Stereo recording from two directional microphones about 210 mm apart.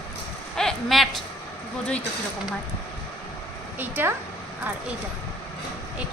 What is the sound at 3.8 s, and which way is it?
Speech, 10° right (ahead or behind).